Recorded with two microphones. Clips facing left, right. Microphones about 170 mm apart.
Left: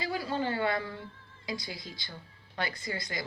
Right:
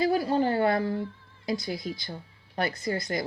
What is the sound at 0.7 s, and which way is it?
Speech, 40° right (ahead or behind).